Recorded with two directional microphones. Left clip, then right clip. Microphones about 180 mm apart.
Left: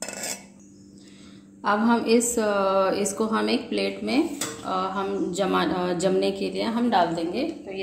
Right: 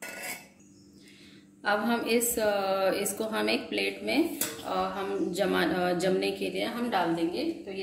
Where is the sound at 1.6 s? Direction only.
40° left (ahead or behind).